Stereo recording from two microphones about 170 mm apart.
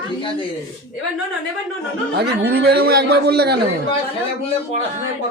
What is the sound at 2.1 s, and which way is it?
A man's voice, 70° right (ahead or behind).